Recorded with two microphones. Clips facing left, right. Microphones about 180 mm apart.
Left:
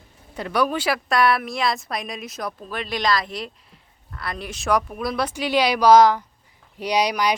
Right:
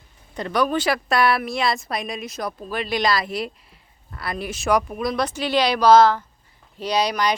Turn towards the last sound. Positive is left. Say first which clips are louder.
# even
turn(degrees=10)  # may be behind; listen again after turning